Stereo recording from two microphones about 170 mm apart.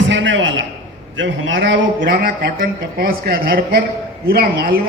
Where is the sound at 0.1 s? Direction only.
90° right.